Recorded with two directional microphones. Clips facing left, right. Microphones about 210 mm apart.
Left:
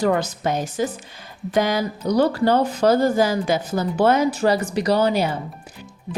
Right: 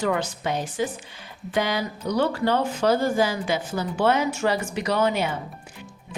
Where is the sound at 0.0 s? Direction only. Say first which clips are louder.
Left 5 dB; 40° left (ahead or behind).